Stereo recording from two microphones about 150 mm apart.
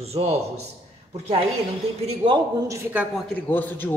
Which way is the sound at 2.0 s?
40° right (ahead or behind).